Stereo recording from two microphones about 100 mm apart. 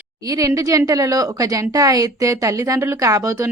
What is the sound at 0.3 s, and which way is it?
Speech, 35° right (ahead or behind).